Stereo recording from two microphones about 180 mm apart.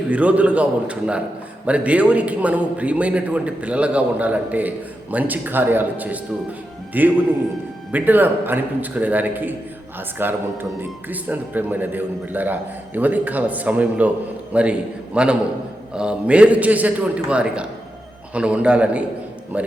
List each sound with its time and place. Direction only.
0.1 s a man's voice: 5° right (ahead or behind)